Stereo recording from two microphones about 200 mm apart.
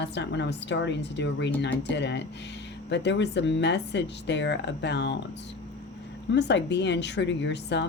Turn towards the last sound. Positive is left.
turn(degrees=60)  # may be behind; listen again after turning